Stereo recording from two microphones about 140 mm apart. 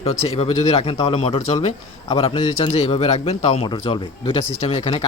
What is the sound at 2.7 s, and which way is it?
Speech, 50° left (ahead or behind).